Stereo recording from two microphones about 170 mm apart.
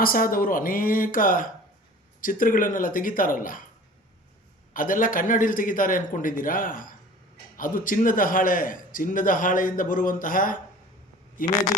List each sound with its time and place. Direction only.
0.0 s a man's voice: 55° left (ahead or behind)
4.7 s a man's voice: 55° left (ahead or behind)